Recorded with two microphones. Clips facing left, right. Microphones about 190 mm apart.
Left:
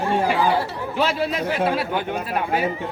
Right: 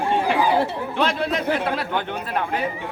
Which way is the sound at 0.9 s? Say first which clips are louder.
Left 1 dB; 5° left (ahead or behind).